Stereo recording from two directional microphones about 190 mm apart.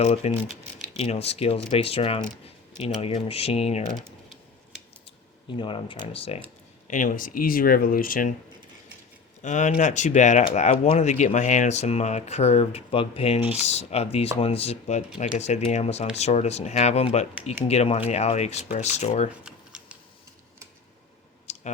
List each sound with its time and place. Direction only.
0.0 s speech: 35° left (ahead or behind)
5.5 s speech: 25° left (ahead or behind)
6.8 s speech: 40° left (ahead or behind)
9.4 s speech: 40° left (ahead or behind)
19.3 s a sound: 5° right (ahead or behind)
21.5 s clicking: 35° left (ahead or behind)